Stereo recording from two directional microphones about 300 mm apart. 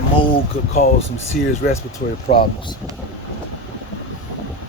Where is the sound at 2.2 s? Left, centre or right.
Centre.